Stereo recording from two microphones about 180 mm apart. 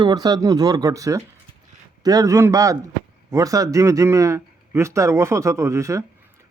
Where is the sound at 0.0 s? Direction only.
20° right (ahead or behind).